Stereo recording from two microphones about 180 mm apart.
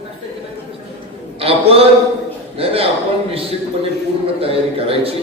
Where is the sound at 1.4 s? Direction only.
30° right (ahead or behind).